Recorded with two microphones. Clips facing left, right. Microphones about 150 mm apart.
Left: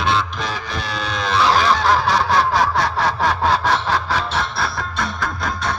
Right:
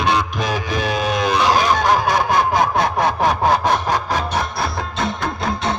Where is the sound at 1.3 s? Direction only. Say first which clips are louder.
Left 2 dB; 15° right (ahead or behind).